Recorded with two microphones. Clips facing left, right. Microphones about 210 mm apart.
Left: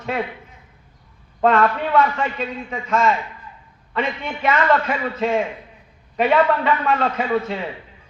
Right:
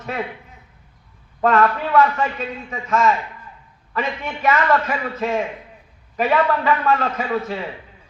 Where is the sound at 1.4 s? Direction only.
30° left (ahead or behind).